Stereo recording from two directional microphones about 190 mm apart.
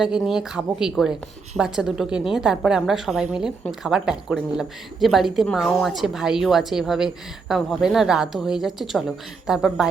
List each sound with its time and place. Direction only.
0.0 s a woman's voice: 5° right (ahead or behind)